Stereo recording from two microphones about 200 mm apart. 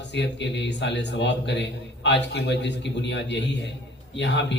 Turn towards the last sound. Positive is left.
turn(degrees=60)  # may be behind; listen again after turning